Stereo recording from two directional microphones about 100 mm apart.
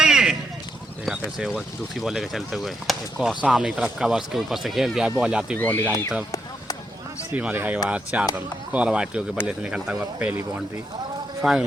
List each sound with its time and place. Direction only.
0.0 s a sound: 5° right (ahead or behind)
1.4 s speech: 5° right (ahead or behind)
5.5 s speech: 20° left (ahead or behind)
7.3 s speech: 15° right (ahead or behind)